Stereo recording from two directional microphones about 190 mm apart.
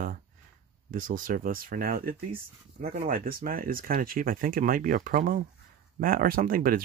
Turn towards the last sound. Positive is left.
turn(degrees=-50)  # may be behind; listen again after turning